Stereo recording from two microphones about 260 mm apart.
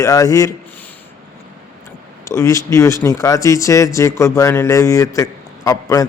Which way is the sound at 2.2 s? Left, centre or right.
Centre.